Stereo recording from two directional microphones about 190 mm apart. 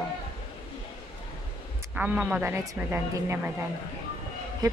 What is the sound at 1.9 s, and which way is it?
Speech, 5° right (ahead or behind).